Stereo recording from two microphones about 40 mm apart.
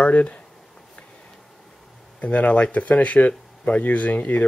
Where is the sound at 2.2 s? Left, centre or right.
Left.